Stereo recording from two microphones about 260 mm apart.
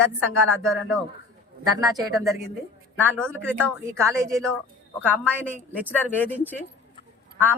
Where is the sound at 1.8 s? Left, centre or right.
Centre.